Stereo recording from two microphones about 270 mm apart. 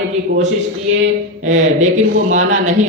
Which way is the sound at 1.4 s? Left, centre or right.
Right.